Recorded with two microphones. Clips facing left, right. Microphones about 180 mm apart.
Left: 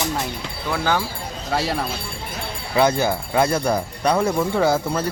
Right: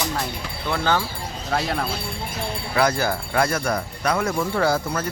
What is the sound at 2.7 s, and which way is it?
Speech, 20° left (ahead or behind).